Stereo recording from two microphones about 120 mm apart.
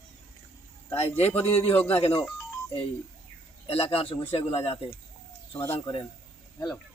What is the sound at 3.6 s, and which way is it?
Speech, 55° left (ahead or behind).